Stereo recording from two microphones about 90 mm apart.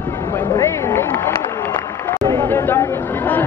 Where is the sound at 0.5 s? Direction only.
30° left (ahead or behind).